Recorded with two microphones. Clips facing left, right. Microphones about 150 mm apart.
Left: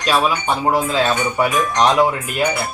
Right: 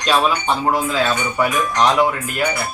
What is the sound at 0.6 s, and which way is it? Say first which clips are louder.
Speech: left 3 dB; 25° left (ahead or behind).